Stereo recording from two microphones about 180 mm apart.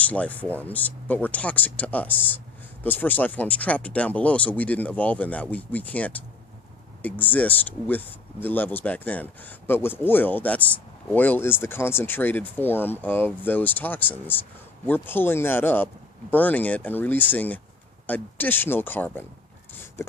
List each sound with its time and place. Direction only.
0.0 s speech: 10° left (ahead or behind)